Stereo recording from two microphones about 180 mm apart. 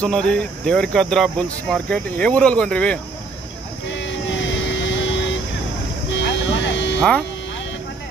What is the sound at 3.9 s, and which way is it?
Vehicle, 90° left.